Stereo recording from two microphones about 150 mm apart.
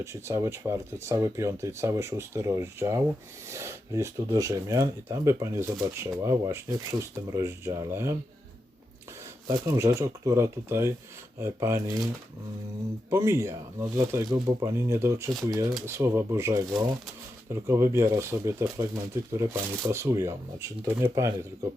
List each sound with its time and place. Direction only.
0.0 s speech: 20° right (ahead or behind)
9.5 s speech: 20° right (ahead or behind)
13.1 s speech: 20° right (ahead or behind)